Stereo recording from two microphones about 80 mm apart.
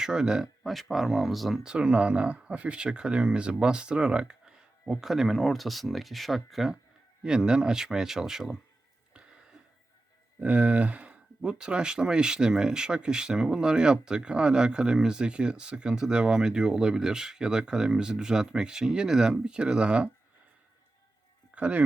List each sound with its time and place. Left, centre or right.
0.0 s speech: centre
1.7 s speech: centre
10.4 s speech: centre
21.5 s a sound: centre